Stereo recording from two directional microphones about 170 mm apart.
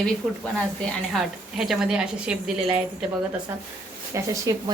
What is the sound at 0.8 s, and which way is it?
A woman's voice, centre (ahead or behind).